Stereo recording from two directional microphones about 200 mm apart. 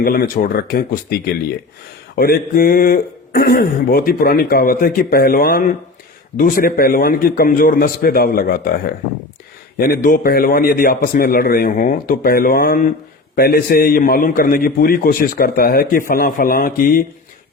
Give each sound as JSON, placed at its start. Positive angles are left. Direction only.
{"t": 0.0, "sound": "a man's voice", "side_deg": 45}